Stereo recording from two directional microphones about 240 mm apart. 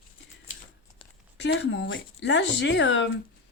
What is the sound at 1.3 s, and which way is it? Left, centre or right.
Speech, left.